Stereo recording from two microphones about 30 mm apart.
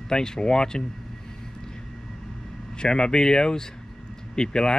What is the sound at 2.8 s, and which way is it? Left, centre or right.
Speech, left.